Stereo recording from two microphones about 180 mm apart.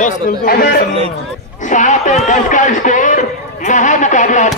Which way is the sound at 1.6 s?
45° left (ahead or behind).